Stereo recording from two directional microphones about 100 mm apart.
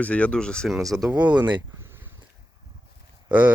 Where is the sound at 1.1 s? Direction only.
15° right (ahead or behind).